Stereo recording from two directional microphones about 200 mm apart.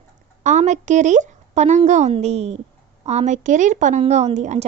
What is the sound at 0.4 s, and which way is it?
A woman's voice, 35° right (ahead or behind).